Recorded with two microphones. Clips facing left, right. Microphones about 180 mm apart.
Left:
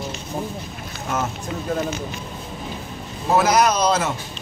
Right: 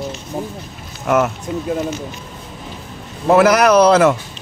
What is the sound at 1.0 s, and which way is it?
Speech, 70° right (ahead or behind).